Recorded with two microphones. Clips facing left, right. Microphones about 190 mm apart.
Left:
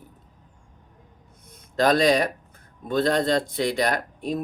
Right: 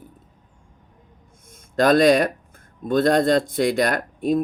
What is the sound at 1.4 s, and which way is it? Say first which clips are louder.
Speech: right 3 dB; 50° right (ahead or behind).